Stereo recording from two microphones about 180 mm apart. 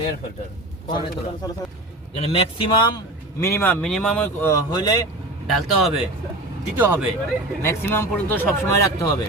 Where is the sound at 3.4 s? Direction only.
15° left (ahead or behind).